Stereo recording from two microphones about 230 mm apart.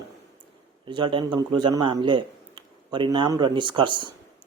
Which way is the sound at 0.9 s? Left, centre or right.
Right.